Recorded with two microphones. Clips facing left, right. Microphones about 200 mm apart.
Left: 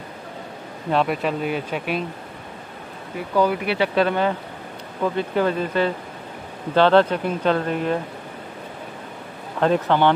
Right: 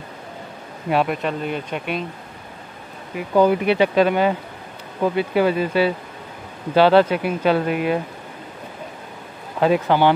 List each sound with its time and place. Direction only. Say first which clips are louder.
0.8 s speech: right 1 dB; 5° right (ahead or behind)
3.3 s speech: right 4 dB; 20° right (ahead or behind)
9.6 s speech: right 2 dB; 10° right (ahead or behind)